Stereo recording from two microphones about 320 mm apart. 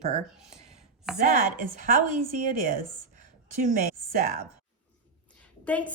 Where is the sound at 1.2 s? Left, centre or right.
Right.